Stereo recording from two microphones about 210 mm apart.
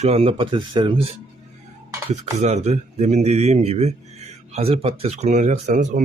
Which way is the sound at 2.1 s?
30° right (ahead or behind).